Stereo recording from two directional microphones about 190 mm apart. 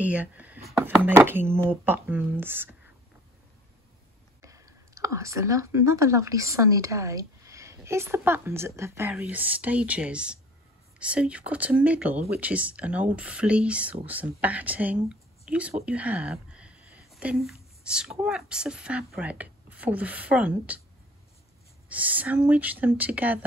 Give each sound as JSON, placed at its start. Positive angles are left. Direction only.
{"t": 0.0, "sound": "speech", "side_deg": -10}
{"t": 4.4, "sound": "speech", "side_deg": -15}
{"t": 21.8, "sound": "speech", "side_deg": -10}